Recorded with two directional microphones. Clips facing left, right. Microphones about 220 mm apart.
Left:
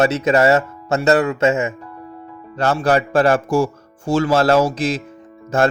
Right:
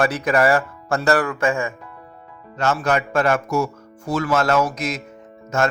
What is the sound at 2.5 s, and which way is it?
Speech, 35° left (ahead or behind).